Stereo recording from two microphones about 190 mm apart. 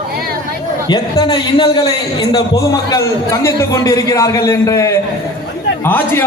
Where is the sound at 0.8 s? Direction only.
25° left (ahead or behind).